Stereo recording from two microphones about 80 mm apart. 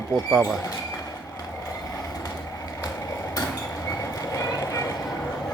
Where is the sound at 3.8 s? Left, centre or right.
Left.